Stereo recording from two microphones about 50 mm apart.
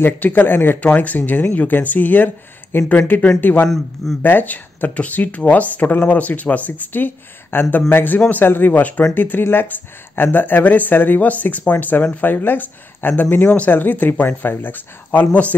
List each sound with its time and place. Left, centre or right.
0.0 s speech: left
3.3 s speech: left
3.6 s a man's voice: centre
4.2 s speech: left
7.5 s speech: left
7.9 s speech: left